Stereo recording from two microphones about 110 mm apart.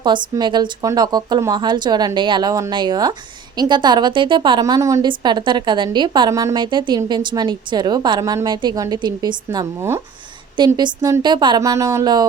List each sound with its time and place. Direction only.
0.0 s a woman's voice: 45° right (ahead or behind)
4.6 s a woman's voice: 30° right (ahead or behind)
5.0 s a woman's voice: 45° right (ahead or behind)
6.3 s speech: 30° right (ahead or behind)
6.6 s a woman's voice: 45° right (ahead or behind)
8.2 s a woman's voice: 30° right (ahead or behind)
10.8 s speech: 40° right (ahead or behind)